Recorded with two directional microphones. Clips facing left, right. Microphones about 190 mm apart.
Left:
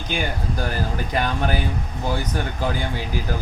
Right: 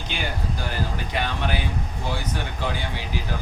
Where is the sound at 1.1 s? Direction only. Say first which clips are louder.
Left 5 dB; 45° left (ahead or behind).